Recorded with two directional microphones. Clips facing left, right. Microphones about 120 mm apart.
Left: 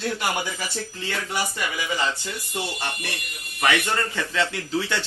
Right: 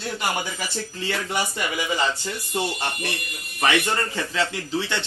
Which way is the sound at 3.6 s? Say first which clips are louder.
Right 1 dB; 15° right (ahead or behind).